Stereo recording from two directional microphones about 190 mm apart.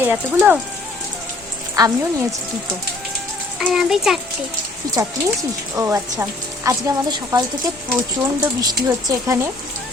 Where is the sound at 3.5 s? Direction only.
Centre (ahead or behind).